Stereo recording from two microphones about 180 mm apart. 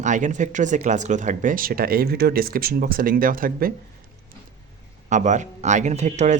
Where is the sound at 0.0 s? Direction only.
45° right (ahead or behind).